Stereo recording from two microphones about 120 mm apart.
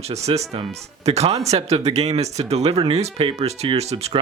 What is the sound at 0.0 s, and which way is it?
Speech, 65° right (ahead or behind).